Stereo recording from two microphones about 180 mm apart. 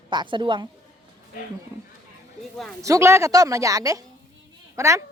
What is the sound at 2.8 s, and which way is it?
A woman's voice, 15° right (ahead or behind).